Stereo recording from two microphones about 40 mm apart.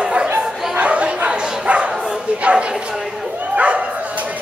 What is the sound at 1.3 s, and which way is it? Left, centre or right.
Bow-wow, right.